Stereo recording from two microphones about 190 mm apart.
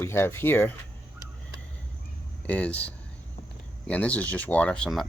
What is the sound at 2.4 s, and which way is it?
Speech, 5° left (ahead or behind).